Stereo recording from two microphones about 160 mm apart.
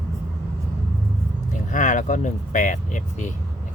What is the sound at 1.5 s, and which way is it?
Speech, 50° left (ahead or behind).